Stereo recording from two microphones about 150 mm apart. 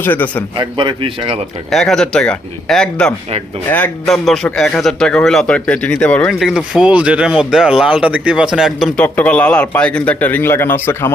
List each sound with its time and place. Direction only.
0.0 s speech: 10° left (ahead or behind)
0.5 s a man's voice: 30° right (ahead or behind)
1.7 s speech: 5° left (ahead or behind)
6.5 s speech: 5° right (ahead or behind)
9.0 s speech: 10° left (ahead or behind)